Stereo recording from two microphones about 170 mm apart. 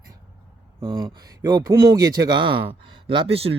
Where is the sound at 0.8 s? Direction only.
30° right (ahead or behind).